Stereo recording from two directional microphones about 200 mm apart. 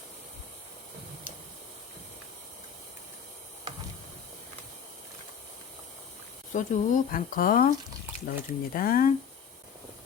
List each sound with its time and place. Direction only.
6.5 s speech: 40° left (ahead or behind)